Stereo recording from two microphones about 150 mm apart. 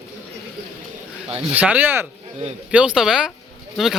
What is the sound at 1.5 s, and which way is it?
A man's voice, 10° right (ahead or behind).